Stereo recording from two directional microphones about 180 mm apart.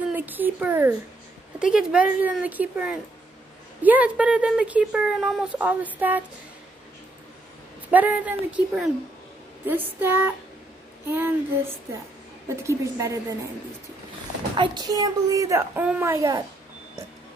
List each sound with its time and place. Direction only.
0.1 s speech: 10° right (ahead or behind)
7.9 s speech: 10° right (ahead or behind)
14.6 s speech: 25° right (ahead or behind)